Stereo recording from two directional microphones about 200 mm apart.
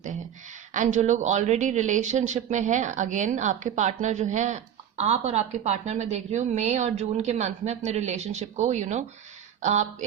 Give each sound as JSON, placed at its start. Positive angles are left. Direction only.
{"t": 0.7, "sound": "speech", "side_deg": -35}